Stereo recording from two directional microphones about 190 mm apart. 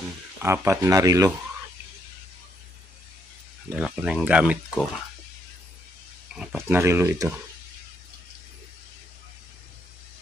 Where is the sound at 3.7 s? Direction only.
5° right (ahead or behind).